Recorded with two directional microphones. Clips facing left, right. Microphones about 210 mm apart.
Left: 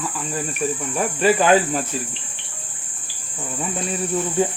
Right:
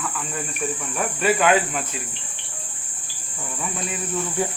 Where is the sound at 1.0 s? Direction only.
30° left (ahead or behind).